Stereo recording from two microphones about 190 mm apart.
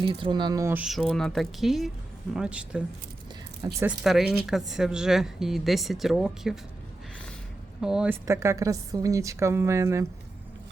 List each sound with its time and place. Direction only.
0.1 s speech: 25° right (ahead or behind); by 2.8 s 5° right (ahead or behind)
3.6 s speech: 20° right (ahead or behind)
4.0 s speech: centre (ahead or behind)
7.8 s a woman's voice: 5° right (ahead or behind)